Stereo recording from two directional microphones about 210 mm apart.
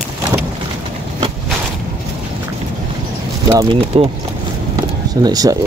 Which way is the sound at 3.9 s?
25° right (ahead or behind).